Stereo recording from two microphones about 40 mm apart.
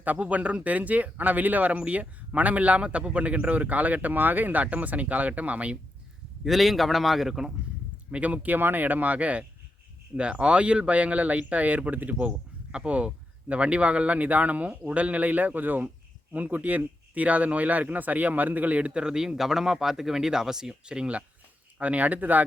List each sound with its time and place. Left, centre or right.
0.0 s speech: right
4.6 s speech: right
6.4 s a man's voice: centre
8.1 s speech: right
8.5 s speech: right
12.7 s speech: right
19.0 s speech: centre
21.8 s speech: right